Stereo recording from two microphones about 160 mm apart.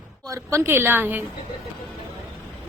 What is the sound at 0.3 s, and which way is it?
Speech, 15° right (ahead or behind).